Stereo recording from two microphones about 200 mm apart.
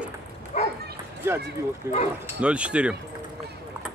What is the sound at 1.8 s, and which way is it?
Speech, 15° right (ahead or behind).